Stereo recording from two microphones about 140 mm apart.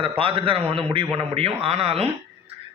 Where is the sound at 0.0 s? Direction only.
40° right (ahead or behind).